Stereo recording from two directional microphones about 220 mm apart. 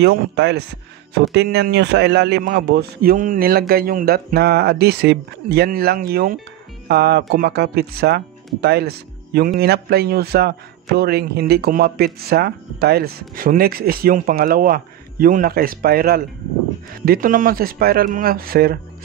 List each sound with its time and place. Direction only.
0.0 s speech: 50° right (ahead or behind)